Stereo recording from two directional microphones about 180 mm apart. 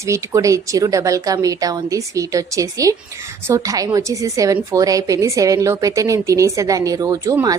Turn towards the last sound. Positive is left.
turn(degrees=-20)  # may be behind; listen again after turning